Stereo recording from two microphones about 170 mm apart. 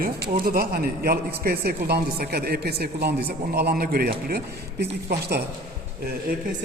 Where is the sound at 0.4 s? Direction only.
60° right (ahead or behind).